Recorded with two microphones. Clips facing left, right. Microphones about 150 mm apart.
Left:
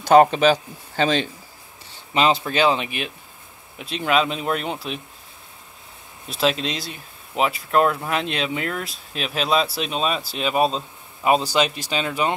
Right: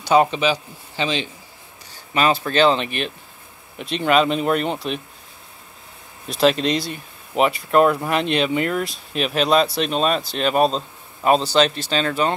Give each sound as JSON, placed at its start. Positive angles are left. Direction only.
{"t": 0.0, "sound": "speech", "side_deg": 45}
{"t": 2.1, "sound": "speech", "side_deg": 20}
{"t": 6.2, "sound": "speech", "side_deg": 0}